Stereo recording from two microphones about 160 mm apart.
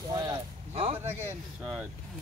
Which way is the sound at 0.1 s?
25° right (ahead or behind).